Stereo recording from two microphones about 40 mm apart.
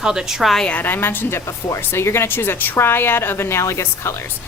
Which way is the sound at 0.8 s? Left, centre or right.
Left.